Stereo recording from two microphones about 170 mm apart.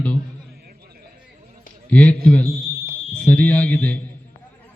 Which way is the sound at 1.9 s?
10° left (ahead or behind).